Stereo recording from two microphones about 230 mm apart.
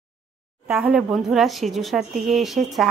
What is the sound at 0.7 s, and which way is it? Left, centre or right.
A woman's voice, centre.